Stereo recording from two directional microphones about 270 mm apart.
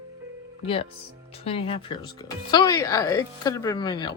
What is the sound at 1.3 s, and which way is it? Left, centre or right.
Speech, left.